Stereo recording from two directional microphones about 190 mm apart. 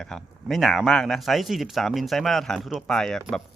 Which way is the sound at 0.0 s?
Centre (ahead or behind).